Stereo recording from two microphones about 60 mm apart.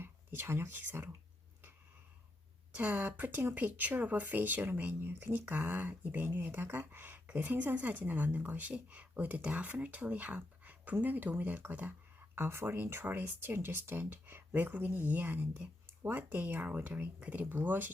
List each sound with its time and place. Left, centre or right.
0.0 s speech: right
2.7 s speech: right
12.3 s speech: right